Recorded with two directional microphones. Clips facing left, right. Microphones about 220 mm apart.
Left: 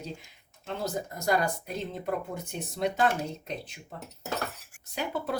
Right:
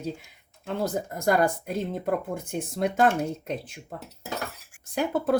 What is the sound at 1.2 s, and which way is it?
Speech, 55° right (ahead or behind).